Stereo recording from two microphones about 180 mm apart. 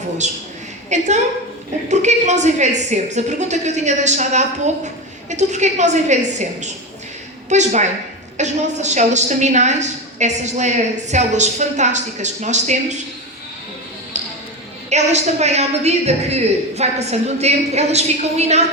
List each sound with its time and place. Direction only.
0.2 s a woman's voice: 40° right (ahead or behind)
7.5 s a woman's voice: 40° right (ahead or behind)
14.8 s a woman's voice: 40° right (ahead or behind)